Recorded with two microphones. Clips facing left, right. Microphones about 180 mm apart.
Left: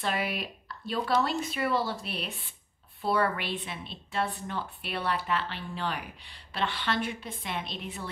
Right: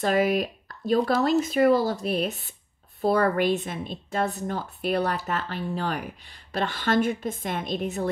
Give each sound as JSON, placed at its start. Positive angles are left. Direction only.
{"t": 0.0, "sound": "a woman's voice", "side_deg": -40}